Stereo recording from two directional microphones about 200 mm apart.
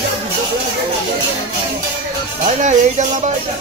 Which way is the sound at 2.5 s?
35° right (ahead or behind).